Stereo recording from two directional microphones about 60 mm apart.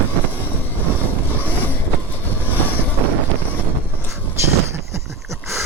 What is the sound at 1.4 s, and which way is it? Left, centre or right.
Train, left.